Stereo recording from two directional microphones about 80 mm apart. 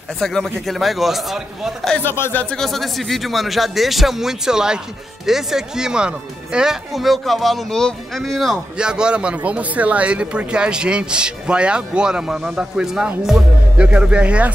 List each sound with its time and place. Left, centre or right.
0.2 s speech: centre
2.0 s speech: left
2.5 s speech: centre
8.7 s speech: centre
13.7 s speech: centre